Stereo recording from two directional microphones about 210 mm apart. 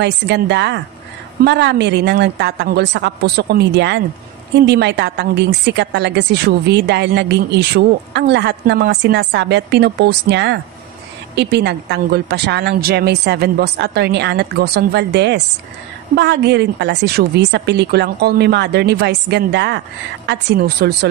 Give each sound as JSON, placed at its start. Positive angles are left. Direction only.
{"t": 0.0, "sound": "a woman's voice", "side_deg": -55}